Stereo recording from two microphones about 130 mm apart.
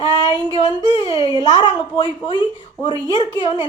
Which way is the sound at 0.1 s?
35° left (ahead or behind).